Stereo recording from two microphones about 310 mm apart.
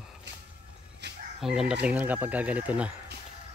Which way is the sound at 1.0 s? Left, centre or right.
Right.